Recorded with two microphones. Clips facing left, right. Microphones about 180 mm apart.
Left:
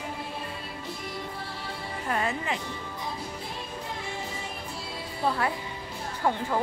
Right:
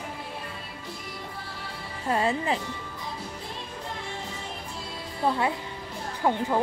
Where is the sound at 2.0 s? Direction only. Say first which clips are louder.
Right 4 dB; 30° right (ahead or behind).